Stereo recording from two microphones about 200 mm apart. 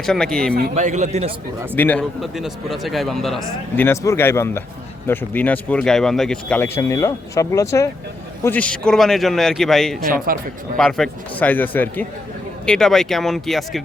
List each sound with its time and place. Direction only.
0.0 s a man's voice: 5° left (ahead or behind)
0.7 s speech: 35° right (ahead or behind)
1.7 s a man's voice: 10° left (ahead or behind)
3.8 s a man's voice: 15° left (ahead or behind)
10.3 s speech: 45° right (ahead or behind)
10.8 s a man's voice: centre (ahead or behind)